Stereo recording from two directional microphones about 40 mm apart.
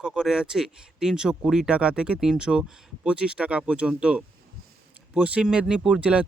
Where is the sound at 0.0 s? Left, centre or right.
Centre.